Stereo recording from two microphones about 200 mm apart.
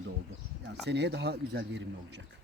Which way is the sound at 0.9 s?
60° right (ahead or behind).